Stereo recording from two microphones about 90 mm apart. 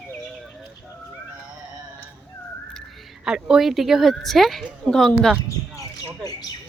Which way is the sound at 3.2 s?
5° right (ahead or behind).